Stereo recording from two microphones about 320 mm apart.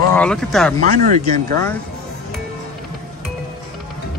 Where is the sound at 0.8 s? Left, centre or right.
Right.